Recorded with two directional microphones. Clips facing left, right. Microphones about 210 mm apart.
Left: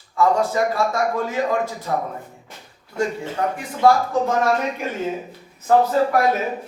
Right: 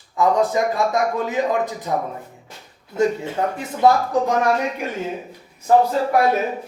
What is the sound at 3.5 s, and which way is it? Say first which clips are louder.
Speech: even; 25° right (ahead or behind).